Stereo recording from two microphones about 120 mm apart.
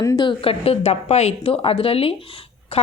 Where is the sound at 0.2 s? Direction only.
45° left (ahead or behind).